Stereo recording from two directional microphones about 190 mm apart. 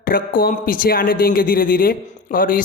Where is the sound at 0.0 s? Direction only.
50° left (ahead or behind).